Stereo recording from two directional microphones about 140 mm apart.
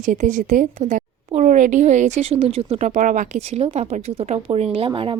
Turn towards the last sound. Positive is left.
turn(degrees=-40)  # may be behind; listen again after turning